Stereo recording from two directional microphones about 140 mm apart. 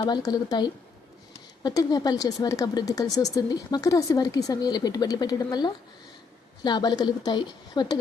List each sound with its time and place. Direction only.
0.0 s speech: 25° left (ahead or behind)